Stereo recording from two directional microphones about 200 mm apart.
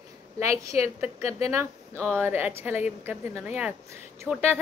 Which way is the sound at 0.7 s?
30° left (ahead or behind).